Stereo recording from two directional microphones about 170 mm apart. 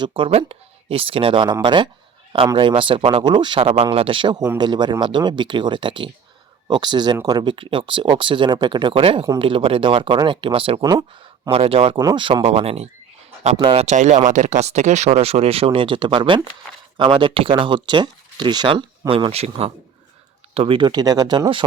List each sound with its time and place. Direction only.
0.0 s speech: 30° right (ahead or behind)